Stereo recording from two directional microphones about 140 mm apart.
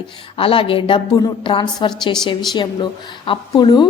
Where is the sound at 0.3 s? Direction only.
40° left (ahead or behind).